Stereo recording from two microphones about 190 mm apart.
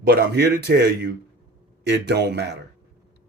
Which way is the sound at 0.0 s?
60° right (ahead or behind).